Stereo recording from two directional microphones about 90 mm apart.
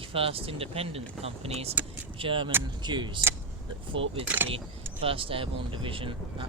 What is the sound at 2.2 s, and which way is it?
Speech, 70° right (ahead or behind).